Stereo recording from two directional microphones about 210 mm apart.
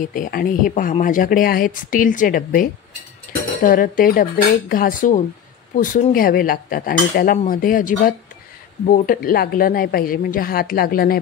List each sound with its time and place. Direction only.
0.0 s a woman's voice: 40° left (ahead or behind)